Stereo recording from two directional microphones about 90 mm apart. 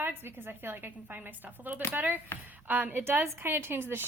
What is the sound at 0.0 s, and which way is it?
A woman's voice, 25° right (ahead or behind).